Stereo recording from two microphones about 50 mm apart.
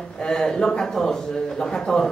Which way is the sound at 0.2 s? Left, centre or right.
Centre.